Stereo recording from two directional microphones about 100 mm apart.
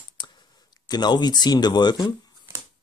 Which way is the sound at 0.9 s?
45° left (ahead or behind).